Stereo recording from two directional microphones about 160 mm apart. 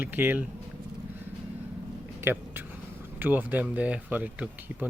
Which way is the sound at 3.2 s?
10° right (ahead or behind).